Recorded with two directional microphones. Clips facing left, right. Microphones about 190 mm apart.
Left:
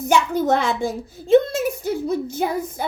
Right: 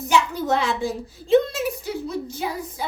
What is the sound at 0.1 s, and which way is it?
A woman's voice, 50° left (ahead or behind).